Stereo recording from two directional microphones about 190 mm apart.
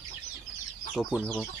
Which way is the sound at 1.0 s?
Centre (ahead or behind).